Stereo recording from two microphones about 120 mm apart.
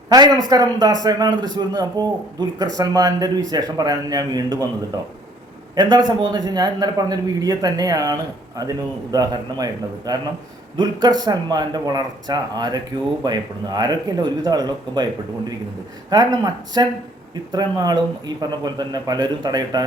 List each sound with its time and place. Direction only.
0.1 s a man's voice: 35° right (ahead or behind)
16.0 s a man's voice: 35° right (ahead or behind)